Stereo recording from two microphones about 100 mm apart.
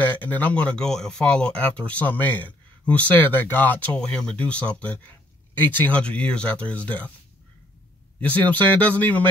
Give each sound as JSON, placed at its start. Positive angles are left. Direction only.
{"t": 0.0, "sound": "speech", "side_deg": 15}
{"t": 8.2, "sound": "speech", "side_deg": 15}